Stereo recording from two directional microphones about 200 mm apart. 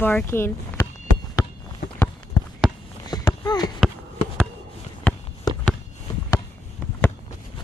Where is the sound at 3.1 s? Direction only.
20° left (ahead or behind).